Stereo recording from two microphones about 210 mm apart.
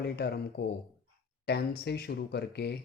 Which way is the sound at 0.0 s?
50° left (ahead or behind).